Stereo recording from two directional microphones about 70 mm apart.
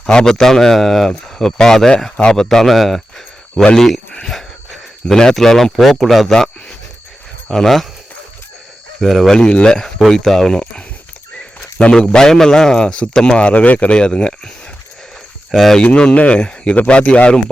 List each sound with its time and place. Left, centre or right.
0.0 s a man's voice: centre
9.0 s speech: centre
9.3 s a man's voice: centre
15.5 s speech: centre
15.8 s a man's voice: centre